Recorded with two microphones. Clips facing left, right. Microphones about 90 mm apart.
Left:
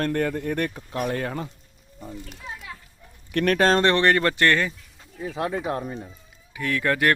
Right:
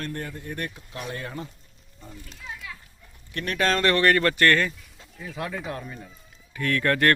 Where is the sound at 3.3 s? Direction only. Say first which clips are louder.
Left 10 dB; 65° left (ahead or behind).